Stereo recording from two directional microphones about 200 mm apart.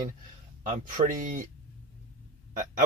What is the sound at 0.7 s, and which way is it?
Speech, 40° right (ahead or behind).